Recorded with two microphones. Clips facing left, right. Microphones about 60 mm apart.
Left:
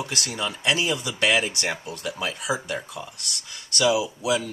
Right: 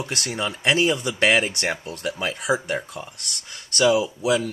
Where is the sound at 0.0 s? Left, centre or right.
Right.